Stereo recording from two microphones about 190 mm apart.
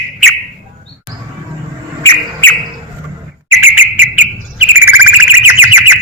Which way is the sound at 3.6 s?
10° right (ahead or behind).